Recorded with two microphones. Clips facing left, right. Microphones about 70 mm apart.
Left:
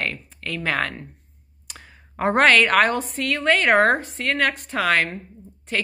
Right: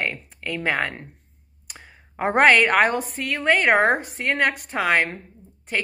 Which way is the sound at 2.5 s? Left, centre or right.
Centre.